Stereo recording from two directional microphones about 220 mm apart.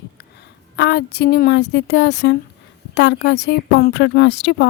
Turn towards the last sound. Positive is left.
turn(degrees=55)  # may be behind; listen again after turning